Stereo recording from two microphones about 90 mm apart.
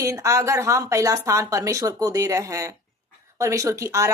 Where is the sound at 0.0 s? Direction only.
35° right (ahead or behind).